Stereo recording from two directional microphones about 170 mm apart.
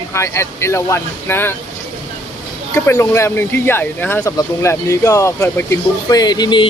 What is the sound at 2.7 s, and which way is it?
Speech, 15° left (ahead or behind).